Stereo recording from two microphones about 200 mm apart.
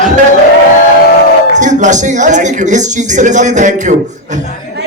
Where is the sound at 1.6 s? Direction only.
40° right (ahead or behind).